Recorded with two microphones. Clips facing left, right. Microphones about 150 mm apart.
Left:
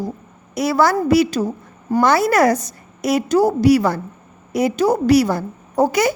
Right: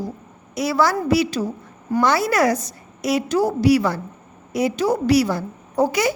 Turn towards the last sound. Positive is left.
turn(degrees=45)  # may be behind; listen again after turning